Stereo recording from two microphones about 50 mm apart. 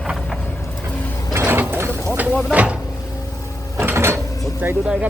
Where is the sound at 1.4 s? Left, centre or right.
Right.